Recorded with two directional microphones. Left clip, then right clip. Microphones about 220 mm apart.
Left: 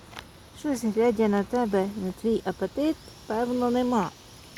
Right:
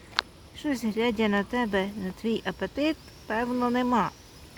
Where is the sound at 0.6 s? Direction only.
40° right (ahead or behind).